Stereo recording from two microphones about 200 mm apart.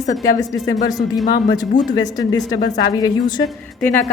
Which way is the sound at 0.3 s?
15° left (ahead or behind).